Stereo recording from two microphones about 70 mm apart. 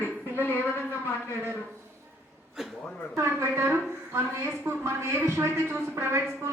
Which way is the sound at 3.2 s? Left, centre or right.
Right.